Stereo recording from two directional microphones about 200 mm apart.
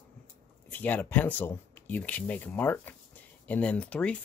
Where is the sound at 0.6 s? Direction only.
10° left (ahead or behind).